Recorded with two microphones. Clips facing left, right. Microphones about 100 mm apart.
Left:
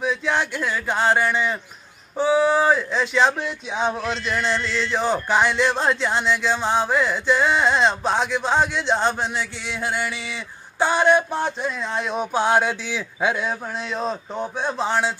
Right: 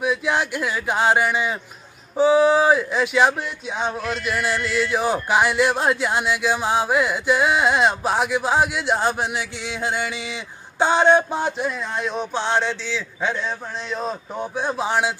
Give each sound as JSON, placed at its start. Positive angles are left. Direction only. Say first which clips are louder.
{"t": 0.0, "sound": "speech", "louder": "right 1 dB", "side_deg": -10}
{"t": 11.9, "sound": "a man's voice", "louder": "left 1 dB", "side_deg": 0}